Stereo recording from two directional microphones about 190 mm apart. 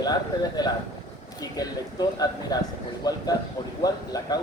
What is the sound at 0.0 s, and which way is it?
A man's voice, 20° left (ahead or behind).